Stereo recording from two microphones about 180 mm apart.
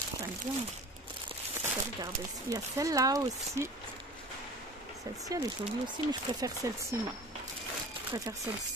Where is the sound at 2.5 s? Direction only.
20° right (ahead or behind).